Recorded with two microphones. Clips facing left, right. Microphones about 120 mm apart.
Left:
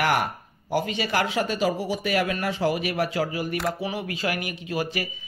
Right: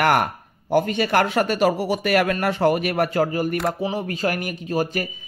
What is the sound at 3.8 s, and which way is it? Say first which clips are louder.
Speech: right 5 dB; 40° right (ahead or behind).